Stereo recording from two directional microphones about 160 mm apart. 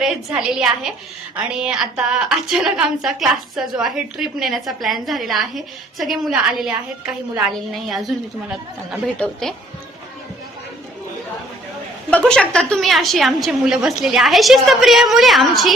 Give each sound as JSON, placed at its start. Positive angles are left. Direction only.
{"t": 0.0, "sound": "a woman's voice", "side_deg": -5}
{"t": 12.1, "sound": "a woman's voice", "side_deg": 5}